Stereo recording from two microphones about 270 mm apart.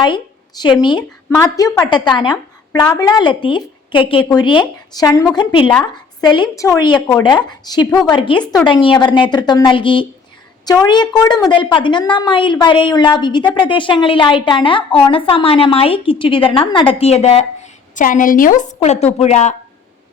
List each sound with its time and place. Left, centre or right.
0.0 s a woman's voice: centre